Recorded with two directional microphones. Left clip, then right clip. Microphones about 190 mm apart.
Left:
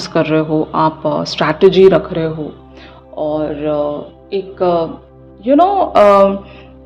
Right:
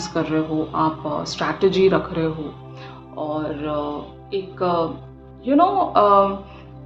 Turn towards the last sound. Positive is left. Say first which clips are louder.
# left 7 dB
turn(degrees=35)  # may be behind; listen again after turning